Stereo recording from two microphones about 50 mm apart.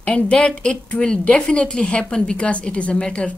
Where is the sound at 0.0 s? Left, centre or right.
Left.